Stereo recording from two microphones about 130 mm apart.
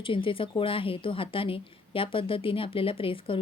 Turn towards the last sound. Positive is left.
turn(degrees=45)  # may be behind; listen again after turning